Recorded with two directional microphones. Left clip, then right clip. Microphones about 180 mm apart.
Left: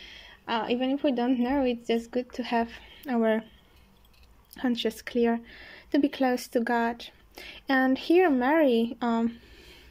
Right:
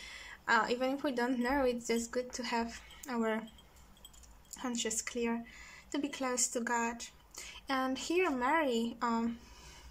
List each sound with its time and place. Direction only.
0.0 s a woman's voice: 10° left (ahead or behind)
4.6 s speech: 25° left (ahead or behind)